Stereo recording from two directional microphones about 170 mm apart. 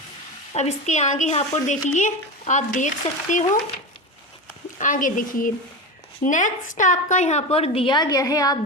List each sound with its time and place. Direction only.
0.5 s speech: 40° left (ahead or behind)
4.8 s a woman's voice: 50° left (ahead or behind); by 8.5 s 20° left (ahead or behind)